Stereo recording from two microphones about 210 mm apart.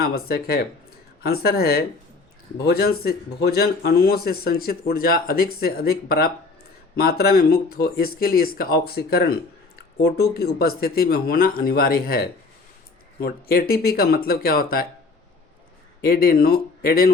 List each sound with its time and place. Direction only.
0.0 s a man's voice: 45° left (ahead or behind)
16.0 s a man's voice: 45° left (ahead or behind)